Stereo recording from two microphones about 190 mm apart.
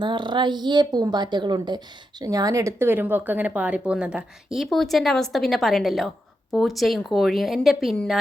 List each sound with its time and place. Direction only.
0.0 s a woman's voice: 25° right (ahead or behind); by 8.2 s centre (ahead or behind)